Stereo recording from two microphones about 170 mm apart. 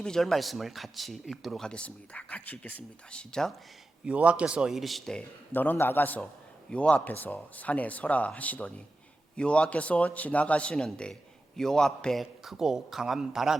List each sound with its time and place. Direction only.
0.0 s speech: 5° left (ahead or behind)
4.0 s speech: 5° right (ahead or behind)
5.5 s speech: 10° left (ahead or behind)